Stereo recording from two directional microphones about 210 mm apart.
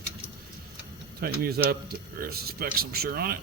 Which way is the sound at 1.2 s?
45° right (ahead or behind).